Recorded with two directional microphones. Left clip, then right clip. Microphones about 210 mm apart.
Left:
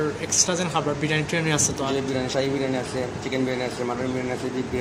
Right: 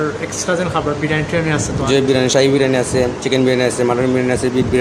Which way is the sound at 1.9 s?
45° right (ahead or behind).